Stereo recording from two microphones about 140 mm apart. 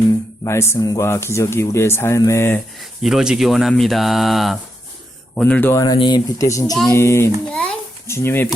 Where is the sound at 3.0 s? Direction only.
5° right (ahead or behind).